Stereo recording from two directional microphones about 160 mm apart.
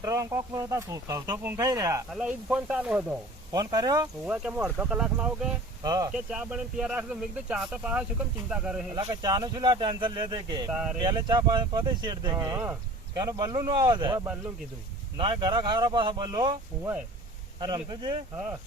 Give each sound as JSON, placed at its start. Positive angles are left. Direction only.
{"t": 0.0, "sound": "speech", "side_deg": -15}
{"t": 2.0, "sound": "speech", "side_deg": -5}
{"t": 3.5, "sound": "speech", "side_deg": -25}
{"t": 4.3, "sound": "speech", "side_deg": -5}
{"t": 5.8, "sound": "speech", "side_deg": -25}
{"t": 6.1, "sound": "speech", "side_deg": -5}
{"t": 9.0, "sound": "speech", "side_deg": -25}
{"t": 10.7, "sound": "speech", "side_deg": -5}
{"t": 11.0, "sound": "speech", "side_deg": -25}
{"t": 15.2, "sound": "speech", "side_deg": -30}